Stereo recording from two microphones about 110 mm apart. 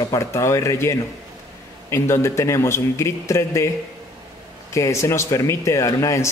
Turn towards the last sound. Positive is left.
turn(degrees=30)  # may be behind; listen again after turning